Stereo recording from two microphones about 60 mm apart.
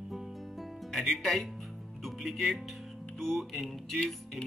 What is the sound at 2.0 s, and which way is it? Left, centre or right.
A man's voice, centre.